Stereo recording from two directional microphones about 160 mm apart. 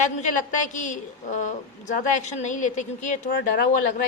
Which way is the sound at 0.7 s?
50° left (ahead or behind).